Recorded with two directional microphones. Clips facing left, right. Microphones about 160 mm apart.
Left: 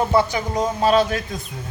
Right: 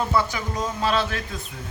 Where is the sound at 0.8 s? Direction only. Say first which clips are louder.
Left 7 dB; 45° left (ahead or behind).